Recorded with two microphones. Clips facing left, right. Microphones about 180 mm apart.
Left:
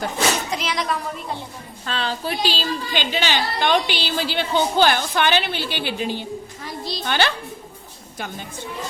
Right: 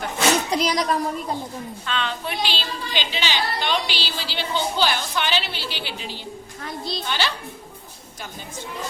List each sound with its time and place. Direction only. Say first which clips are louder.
0.5 s speech: right 3 dB; 35° right (ahead or behind)
1.9 s a woman's voice: left 3 dB; 35° left (ahead or behind); by 6.2 s 55° left (ahead or behind)
6.7 s a woman's voice: right 1 dB; centre (ahead or behind)
7.0 s speech: left 6 dB; 55° left (ahead or behind)